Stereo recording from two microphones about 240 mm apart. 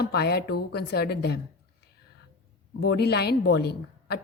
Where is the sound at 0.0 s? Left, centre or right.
Left.